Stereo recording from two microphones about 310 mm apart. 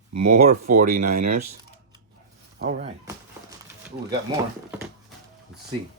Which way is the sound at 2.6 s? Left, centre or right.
Right.